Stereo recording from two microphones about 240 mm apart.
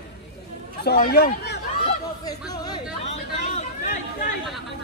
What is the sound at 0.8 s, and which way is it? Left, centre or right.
Speech, left.